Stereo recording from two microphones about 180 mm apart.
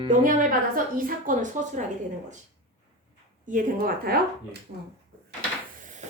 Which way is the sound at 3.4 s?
45° right (ahead or behind).